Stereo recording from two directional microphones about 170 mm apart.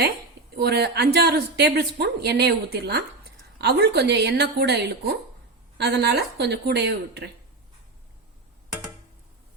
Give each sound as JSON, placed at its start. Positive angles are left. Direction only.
{"t": 0.5, "sound": "a woman's voice", "side_deg": -70}